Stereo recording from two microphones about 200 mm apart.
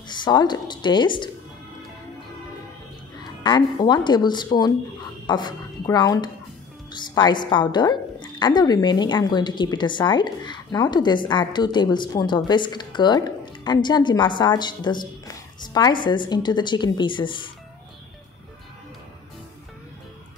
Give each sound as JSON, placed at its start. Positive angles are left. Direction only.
{"t": 0.1, "sound": "a woman's voice", "side_deg": 20}
{"t": 3.4, "sound": "a woman's voice", "side_deg": 20}